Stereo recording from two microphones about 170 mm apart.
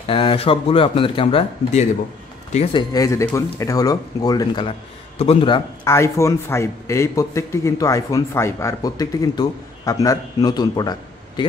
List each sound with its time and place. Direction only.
0.0 s speech: 30° left (ahead or behind)
2.9 s a man's voice: 20° left (ahead or behind)
5.9 s a man's voice: 15° left (ahead or behind)